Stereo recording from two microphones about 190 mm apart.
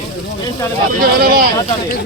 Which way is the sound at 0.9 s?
50° right (ahead or behind).